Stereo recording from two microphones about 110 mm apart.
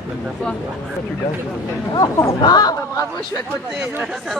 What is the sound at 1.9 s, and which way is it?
Speech, 30° left (ahead or behind).